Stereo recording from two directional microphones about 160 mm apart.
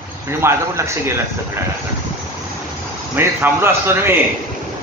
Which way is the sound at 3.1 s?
15° right (ahead or behind).